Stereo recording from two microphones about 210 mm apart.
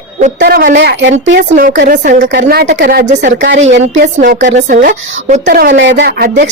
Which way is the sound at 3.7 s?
55° right (ahead or behind).